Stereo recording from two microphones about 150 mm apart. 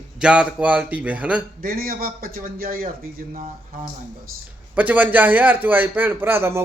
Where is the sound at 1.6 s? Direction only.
80° right.